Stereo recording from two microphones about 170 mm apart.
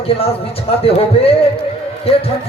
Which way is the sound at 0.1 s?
35° left (ahead or behind).